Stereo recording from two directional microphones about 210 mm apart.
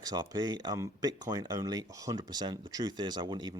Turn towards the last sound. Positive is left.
turn(degrees=-20)  # may be behind; listen again after turning